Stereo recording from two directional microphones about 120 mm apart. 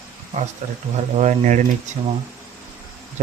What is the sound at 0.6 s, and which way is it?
Speech, 85° right.